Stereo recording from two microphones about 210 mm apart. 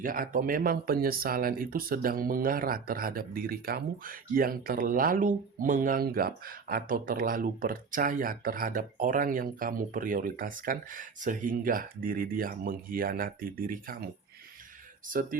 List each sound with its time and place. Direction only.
0.0 s speech: 40° right (ahead or behind)
15.0 s speech: 40° right (ahead or behind)